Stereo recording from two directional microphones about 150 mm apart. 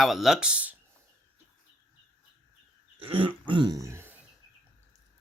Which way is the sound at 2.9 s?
40° right (ahead or behind).